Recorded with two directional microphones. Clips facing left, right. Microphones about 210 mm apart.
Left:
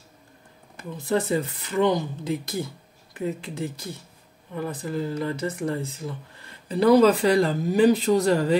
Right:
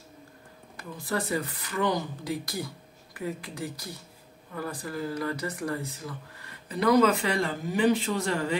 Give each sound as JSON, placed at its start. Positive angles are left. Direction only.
{"t": 0.7, "sound": "speech", "side_deg": 25}